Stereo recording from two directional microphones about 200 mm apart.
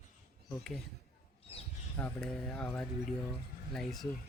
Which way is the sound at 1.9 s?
5° left (ahead or behind).